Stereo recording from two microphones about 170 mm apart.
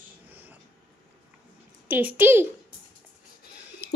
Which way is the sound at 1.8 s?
10° right (ahead or behind).